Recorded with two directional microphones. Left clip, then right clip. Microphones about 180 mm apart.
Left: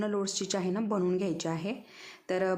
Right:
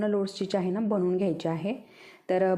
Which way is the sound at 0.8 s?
5° right (ahead or behind).